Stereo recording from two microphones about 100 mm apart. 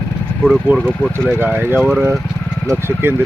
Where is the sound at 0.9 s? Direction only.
10° left (ahead or behind).